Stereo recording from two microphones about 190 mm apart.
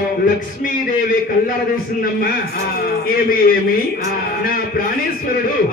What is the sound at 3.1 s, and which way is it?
Speech, 50° left (ahead or behind).